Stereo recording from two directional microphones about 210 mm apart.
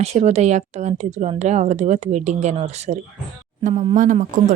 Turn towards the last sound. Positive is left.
turn(degrees=-40)  # may be behind; listen again after turning